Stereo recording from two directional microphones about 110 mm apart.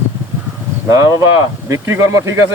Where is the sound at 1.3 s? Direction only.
30° right (ahead or behind).